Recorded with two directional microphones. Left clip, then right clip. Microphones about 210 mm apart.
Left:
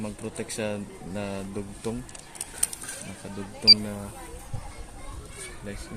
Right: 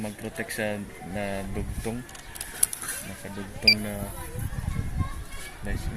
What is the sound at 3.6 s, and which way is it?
Speech, 5° right (ahead or behind).